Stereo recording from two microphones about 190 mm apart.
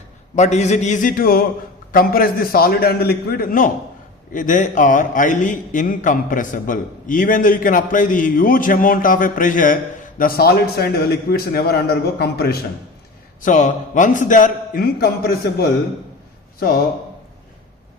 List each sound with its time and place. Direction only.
0.3 s a man's voice: 35° left (ahead or behind); by 12.5 s 55° left (ahead or behind)
13.4 s a man's voice: 40° left (ahead or behind)